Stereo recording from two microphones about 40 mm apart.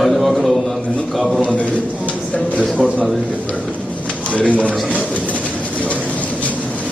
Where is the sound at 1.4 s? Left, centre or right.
Left.